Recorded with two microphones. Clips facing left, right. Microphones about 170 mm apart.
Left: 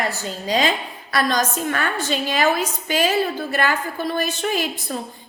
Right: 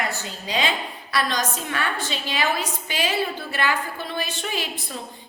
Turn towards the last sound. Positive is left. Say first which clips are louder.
# left 6 dB
turn(degrees=45)  # may be behind; listen again after turning